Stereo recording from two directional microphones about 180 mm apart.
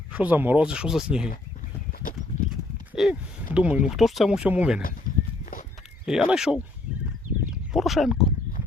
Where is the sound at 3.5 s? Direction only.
5° right (ahead or behind).